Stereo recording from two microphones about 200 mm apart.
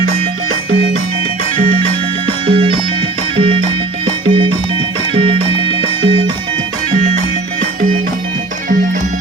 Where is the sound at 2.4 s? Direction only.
30° right (ahead or behind).